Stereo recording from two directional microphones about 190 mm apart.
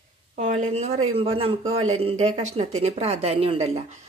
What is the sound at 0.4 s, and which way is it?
A woman's voice, 40° right (ahead or behind).